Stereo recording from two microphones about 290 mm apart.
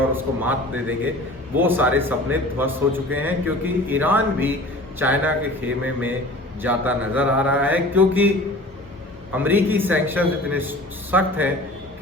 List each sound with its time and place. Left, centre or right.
0.1 s a man's voice: centre
6.6 s mantra: centre
9.3 s a man's voice: centre